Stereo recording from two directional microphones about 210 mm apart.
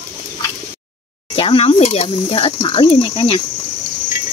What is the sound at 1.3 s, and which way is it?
Speech, 25° left (ahead or behind).